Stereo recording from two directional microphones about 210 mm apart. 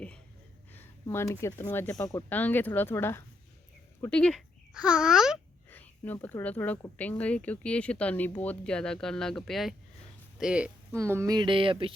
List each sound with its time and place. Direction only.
0.7 s speech: 10° left (ahead or behind)
5.7 s speech: 10° left (ahead or behind); by 11.9 s 25° right (ahead or behind)